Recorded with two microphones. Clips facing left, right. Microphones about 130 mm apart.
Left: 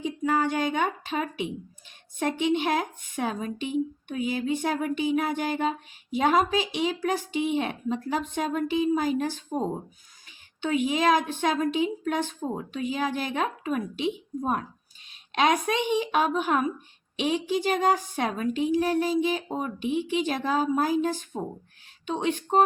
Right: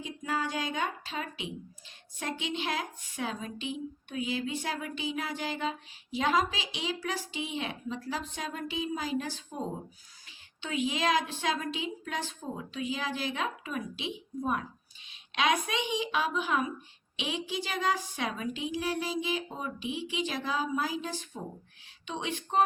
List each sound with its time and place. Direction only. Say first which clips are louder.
0.3 s a woman's voice: left 7 dB; 60° left (ahead or behind)